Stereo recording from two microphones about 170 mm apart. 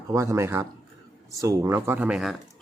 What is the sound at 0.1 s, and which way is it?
A man's voice, 15° right (ahead or behind).